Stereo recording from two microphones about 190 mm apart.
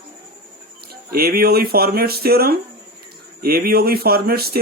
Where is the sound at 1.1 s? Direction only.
55° right (ahead or behind).